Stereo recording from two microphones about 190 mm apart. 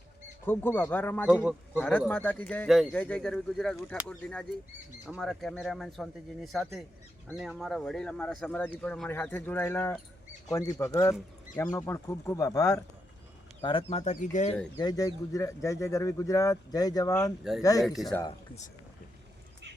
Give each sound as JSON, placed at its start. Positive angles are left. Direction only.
{"t": 0.4, "sound": "speech", "side_deg": 10}
{"t": 14.8, "sound": "speech", "side_deg": 20}
{"t": 17.8, "sound": "speech", "side_deg": 0}